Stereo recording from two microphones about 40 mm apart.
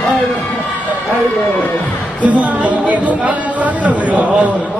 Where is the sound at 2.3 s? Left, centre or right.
Right.